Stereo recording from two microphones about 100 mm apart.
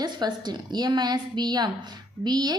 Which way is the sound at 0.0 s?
45° right (ahead or behind).